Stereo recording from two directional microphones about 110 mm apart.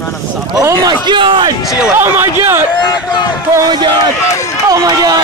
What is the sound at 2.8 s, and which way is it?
Speech, 40° left (ahead or behind).